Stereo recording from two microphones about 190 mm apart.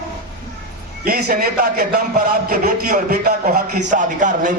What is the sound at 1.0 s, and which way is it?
A man's voice, 50° right (ahead or behind).